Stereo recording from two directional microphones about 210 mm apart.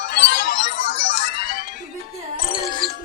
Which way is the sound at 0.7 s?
65° left (ahead or behind).